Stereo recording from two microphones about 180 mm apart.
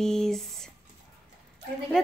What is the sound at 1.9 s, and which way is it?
Speech, 5° left (ahead or behind).